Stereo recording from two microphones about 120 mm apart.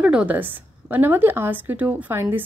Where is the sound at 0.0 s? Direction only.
10° right (ahead or behind).